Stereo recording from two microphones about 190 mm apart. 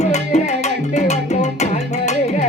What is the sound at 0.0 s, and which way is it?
Music, 35° left (ahead or behind).